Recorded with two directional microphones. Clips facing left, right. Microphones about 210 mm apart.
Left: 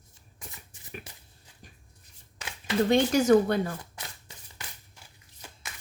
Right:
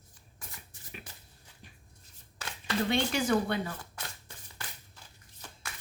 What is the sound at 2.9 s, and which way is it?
Speech, 40° left (ahead or behind).